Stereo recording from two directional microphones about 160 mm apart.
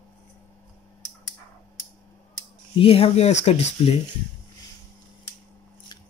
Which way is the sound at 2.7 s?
35° left (ahead or behind).